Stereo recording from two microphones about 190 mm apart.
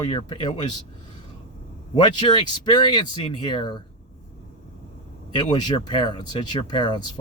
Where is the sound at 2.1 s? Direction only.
25° left (ahead or behind).